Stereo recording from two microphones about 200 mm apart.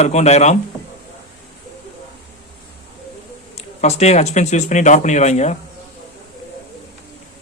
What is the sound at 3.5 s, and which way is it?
Speech, 35° left (ahead or behind).